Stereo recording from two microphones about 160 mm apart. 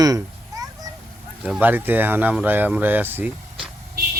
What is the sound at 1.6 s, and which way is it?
A man's voice, 10° right (ahead or behind).